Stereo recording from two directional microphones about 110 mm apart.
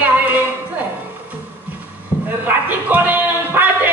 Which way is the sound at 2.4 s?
15° right (ahead or behind).